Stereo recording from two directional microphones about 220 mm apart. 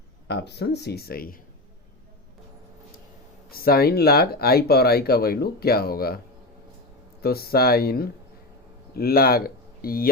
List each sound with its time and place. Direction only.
0.3 s speech: 50° left (ahead or behind)
3.5 s speech: 45° left (ahead or behind)
7.2 s speech: 45° left (ahead or behind)